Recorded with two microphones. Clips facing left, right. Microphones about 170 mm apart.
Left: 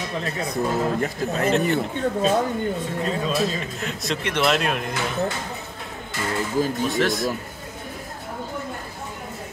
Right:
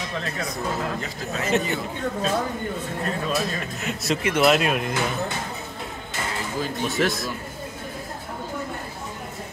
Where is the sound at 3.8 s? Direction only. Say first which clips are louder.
Right 4 dB; 5° right (ahead or behind).